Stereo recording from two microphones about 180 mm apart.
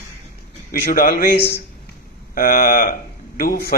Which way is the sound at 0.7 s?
55° left (ahead or behind).